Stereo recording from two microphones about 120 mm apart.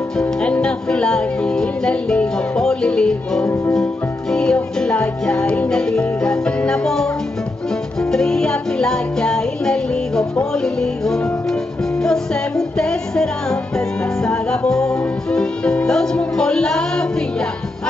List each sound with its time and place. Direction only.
0.2 s speech: 10° left (ahead or behind)
3.7 s music: 5° left (ahead or behind)